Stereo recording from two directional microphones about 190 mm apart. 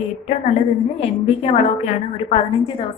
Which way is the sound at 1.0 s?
30° left (ahead or behind).